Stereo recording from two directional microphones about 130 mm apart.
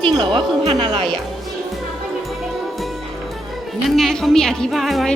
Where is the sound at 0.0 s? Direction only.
35° right (ahead or behind).